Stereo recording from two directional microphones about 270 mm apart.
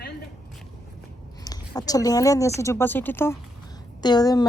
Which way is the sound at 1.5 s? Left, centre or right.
Centre.